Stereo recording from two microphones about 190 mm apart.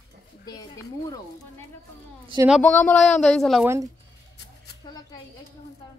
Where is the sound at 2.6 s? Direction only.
10° left (ahead or behind).